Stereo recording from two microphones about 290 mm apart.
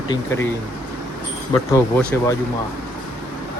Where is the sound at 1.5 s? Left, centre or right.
Centre.